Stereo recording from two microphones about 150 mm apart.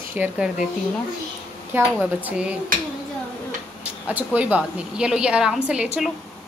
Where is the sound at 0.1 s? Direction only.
10° right (ahead or behind).